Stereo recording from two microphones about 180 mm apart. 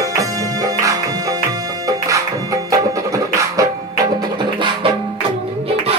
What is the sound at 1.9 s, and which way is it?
Music, 20° right (ahead or behind).